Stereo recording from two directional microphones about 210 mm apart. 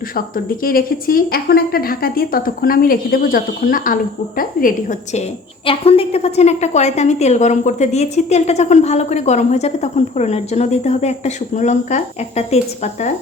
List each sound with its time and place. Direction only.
0.6 s a woman's voice: 45° left (ahead or behind)
5.6 s a woman's voice: 25° left (ahead or behind)